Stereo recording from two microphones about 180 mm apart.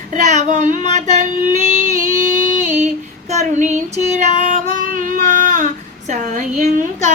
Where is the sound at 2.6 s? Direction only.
45° right (ahead or behind).